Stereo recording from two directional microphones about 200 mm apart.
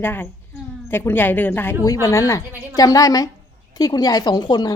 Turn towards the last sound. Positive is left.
turn(degrees=20)  # may be behind; listen again after turning